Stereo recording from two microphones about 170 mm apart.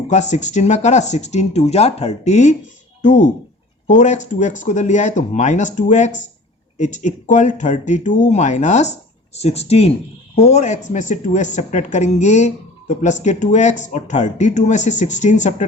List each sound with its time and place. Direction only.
0.1 s speech: 45° left (ahead or behind)